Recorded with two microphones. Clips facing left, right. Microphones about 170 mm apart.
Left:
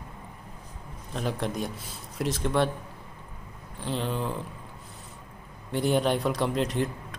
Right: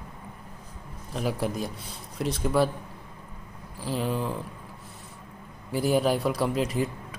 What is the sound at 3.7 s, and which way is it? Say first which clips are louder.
Speech: right 2 dB; 5° right (ahead or behind).